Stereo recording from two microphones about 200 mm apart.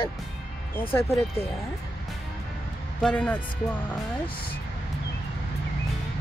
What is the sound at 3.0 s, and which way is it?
Speech, 5° left (ahead or behind).